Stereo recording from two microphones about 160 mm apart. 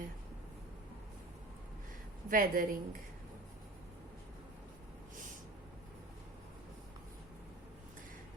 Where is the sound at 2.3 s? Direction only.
60° right (ahead or behind).